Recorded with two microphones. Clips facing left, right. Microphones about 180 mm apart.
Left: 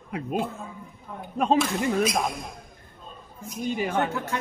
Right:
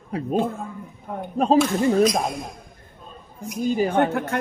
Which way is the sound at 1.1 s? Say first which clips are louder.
Right 8 dB; 60° right (ahead or behind).